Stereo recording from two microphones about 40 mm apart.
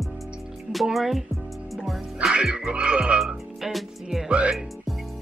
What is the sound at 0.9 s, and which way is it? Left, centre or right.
Speech, centre.